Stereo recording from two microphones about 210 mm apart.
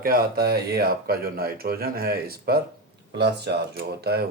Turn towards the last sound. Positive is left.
turn(degrees=-50)  # may be behind; listen again after turning